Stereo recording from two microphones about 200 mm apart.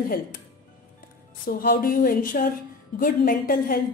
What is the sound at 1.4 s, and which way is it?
A woman's voice, 45° left (ahead or behind).